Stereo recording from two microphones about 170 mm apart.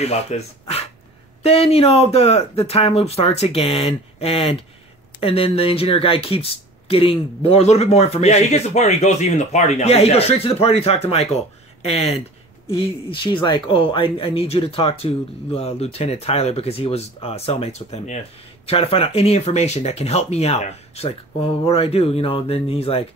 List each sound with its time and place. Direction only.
0.0 s speech: 40° left (ahead or behind)